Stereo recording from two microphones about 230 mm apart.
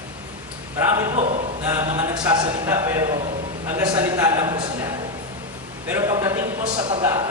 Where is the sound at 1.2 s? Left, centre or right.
Right.